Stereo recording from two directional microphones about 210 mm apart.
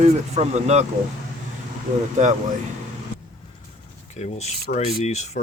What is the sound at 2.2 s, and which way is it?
Speech, 35° right (ahead or behind).